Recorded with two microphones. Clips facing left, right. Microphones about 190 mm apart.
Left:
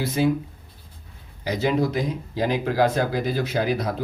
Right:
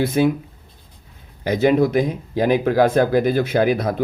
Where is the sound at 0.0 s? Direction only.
55° right (ahead or behind).